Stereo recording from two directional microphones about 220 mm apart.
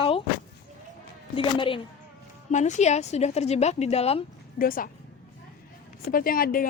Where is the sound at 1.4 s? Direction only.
25° left (ahead or behind).